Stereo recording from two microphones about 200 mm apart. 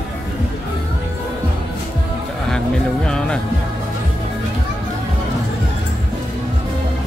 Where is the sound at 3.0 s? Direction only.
5° left (ahead or behind).